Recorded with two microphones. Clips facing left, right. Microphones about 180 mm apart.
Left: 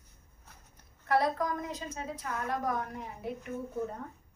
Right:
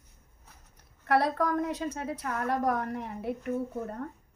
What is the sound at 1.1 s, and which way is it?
A woman's voice, 70° right (ahead or behind).